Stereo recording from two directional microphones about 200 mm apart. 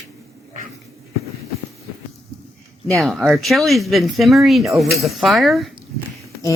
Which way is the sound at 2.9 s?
Centre (ahead or behind).